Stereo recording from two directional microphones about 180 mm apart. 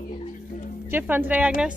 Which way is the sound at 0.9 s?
10° right (ahead or behind).